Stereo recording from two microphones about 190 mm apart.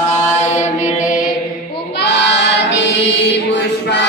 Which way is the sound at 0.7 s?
40° left (ahead or behind).